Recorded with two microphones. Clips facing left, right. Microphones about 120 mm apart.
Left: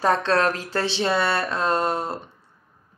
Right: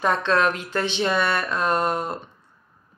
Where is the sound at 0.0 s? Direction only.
35° left (ahead or behind).